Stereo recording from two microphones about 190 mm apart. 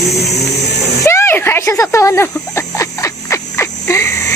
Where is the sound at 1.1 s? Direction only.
15° left (ahead or behind).